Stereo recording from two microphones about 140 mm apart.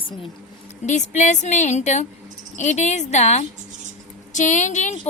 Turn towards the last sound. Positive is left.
turn(degrees=60)  # may be behind; listen again after turning